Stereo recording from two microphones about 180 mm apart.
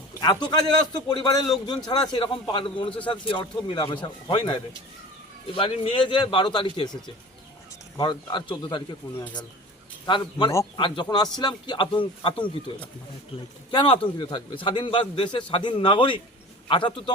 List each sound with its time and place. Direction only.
0.2 s a man's voice: 25° left (ahead or behind)
13.7 s a man's voice: 25° left (ahead or behind)